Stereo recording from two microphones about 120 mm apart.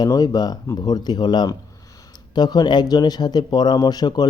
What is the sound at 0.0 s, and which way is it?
A man's voice, 35° left (ahead or behind).